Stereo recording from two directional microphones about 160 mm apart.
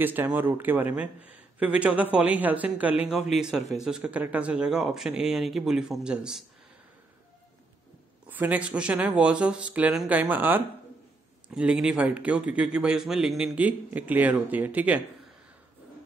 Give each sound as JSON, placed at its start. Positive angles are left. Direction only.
{"t": 0.0, "sound": "a man's voice", "side_deg": -10}
{"t": 8.3, "sound": "a man's voice", "side_deg": -10}